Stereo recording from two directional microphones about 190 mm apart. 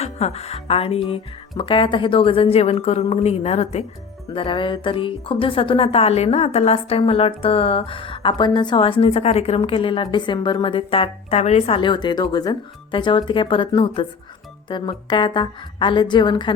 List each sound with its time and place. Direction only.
0.0 s a woman's voice: 35° left (ahead or behind)